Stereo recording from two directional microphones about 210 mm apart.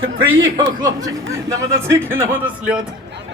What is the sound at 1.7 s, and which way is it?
A man's voice, 10° right (ahead or behind).